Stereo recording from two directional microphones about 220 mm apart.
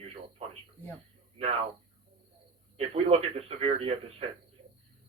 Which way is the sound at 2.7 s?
30° right (ahead or behind).